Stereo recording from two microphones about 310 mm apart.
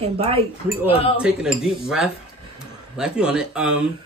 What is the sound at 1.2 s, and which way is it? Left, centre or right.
Speech, centre.